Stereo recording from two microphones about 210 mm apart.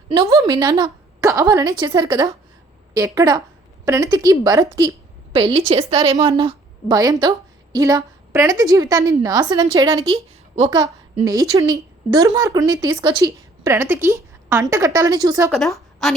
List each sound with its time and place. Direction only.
0.1 s a woman's voice: 20° right (ahead or behind)
15.4 s a woman's voice: centre (ahead or behind)